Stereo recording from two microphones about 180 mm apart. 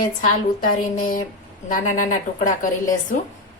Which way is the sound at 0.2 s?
45° left (ahead or behind).